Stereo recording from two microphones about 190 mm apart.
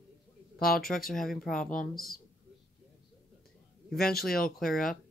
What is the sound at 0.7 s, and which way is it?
Speech, centre (ahead or behind).